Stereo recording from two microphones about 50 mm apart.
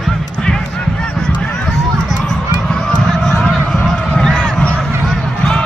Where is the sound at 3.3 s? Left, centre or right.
Centre.